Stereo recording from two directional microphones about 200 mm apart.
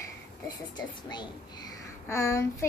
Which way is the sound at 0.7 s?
20° left (ahead or behind).